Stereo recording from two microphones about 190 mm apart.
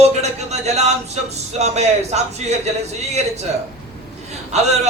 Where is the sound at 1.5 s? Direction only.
35° right (ahead or behind).